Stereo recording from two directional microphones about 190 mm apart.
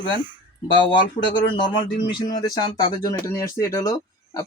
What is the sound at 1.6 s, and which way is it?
Speech, 25° left (ahead or behind).